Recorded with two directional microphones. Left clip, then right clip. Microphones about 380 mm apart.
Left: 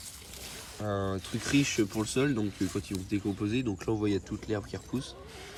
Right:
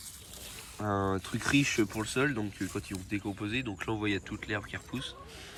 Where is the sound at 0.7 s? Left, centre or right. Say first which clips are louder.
Right 2 dB; centre.